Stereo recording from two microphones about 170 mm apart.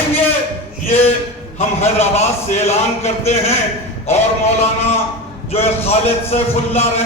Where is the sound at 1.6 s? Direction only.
40° left (ahead or behind).